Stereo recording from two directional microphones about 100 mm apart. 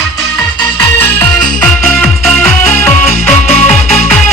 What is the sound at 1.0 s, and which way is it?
Music, 20° left (ahead or behind).